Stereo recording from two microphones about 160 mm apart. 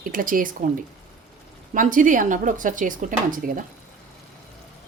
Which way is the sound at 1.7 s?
55° right (ahead or behind).